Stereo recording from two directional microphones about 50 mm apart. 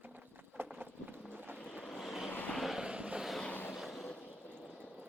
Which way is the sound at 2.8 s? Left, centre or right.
Right.